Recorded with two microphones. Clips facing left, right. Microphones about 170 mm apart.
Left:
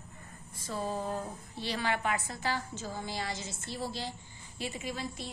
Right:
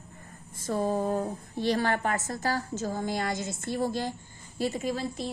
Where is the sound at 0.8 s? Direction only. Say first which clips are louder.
Right 7 dB; 50° right (ahead or behind).